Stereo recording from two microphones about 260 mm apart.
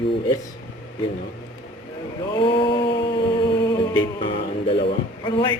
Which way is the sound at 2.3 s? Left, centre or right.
Centre.